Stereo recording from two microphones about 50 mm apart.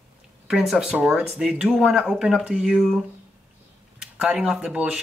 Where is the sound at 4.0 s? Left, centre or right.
Centre.